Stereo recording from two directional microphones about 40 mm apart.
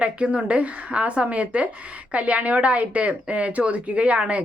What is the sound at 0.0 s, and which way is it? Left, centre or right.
Speech, right.